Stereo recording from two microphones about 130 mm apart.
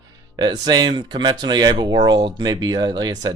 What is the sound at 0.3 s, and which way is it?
Speech, 35° right (ahead or behind).